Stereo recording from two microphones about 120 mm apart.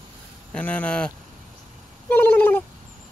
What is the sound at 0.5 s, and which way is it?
Speech, 10° left (ahead or behind).